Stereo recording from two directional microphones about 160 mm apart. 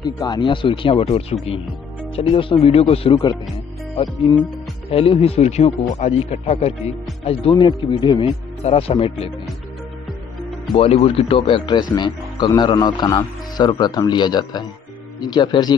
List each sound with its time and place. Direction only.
0.0 s speech: 25° left (ahead or behind)
10.7 s speech: 40° left (ahead or behind)